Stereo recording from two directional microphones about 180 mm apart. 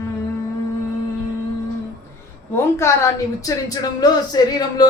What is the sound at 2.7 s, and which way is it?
A woman's voice, 15° left (ahead or behind).